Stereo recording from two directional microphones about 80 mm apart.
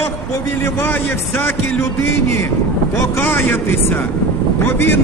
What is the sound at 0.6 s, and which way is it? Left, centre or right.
Speech, left.